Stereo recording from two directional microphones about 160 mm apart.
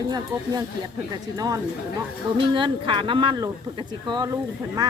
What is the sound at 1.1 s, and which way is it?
Speech, 20° right (ahead or behind).